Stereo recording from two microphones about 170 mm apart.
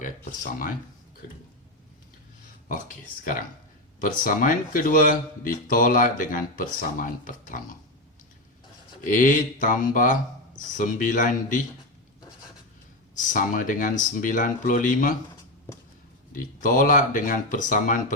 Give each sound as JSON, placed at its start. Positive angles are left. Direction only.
{"t": 0.0, "sound": "speech", "side_deg": 50}
{"t": 2.6, "sound": "speech", "side_deg": 50}
{"t": 9.0, "sound": "speech", "side_deg": 50}
{"t": 13.1, "sound": "speech", "side_deg": 50}
{"t": 16.3, "sound": "speech", "side_deg": 50}